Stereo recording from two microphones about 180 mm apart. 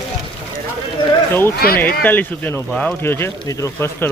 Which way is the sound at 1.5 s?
60° left (ahead or behind).